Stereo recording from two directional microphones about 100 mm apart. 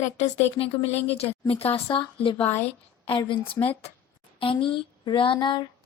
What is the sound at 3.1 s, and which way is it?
Speech, 55° left (ahead or behind).